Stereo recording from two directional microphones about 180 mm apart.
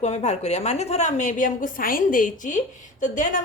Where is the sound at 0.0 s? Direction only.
40° left (ahead or behind).